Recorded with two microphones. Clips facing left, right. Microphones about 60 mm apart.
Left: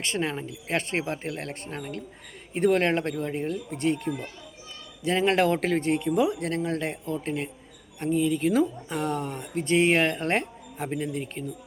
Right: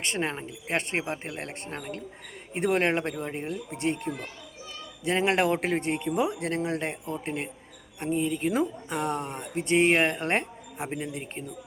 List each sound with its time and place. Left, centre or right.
0.0 s speech: right